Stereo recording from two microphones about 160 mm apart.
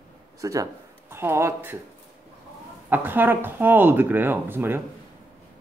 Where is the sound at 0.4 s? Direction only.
20° right (ahead or behind).